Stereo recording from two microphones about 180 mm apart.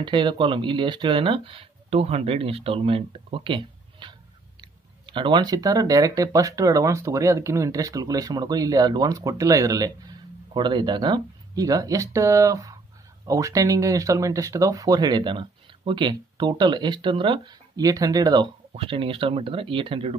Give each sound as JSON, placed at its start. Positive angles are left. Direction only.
{"t": 0.0, "sound": "speech", "side_deg": -25}